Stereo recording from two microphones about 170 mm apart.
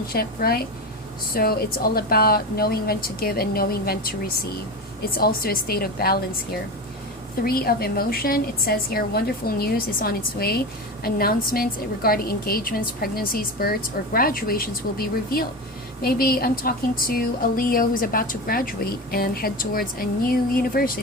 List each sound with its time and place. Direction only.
0.1 s a woman's voice: 65° left (ahead or behind)
7.4 s a woman's voice: 60° left (ahead or behind)